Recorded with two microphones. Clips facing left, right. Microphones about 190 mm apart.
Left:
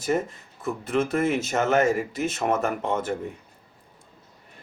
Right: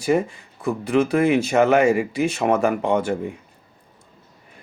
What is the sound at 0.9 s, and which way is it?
Speech, centre (ahead or behind).